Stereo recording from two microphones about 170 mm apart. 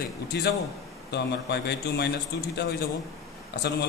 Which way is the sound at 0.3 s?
85° left.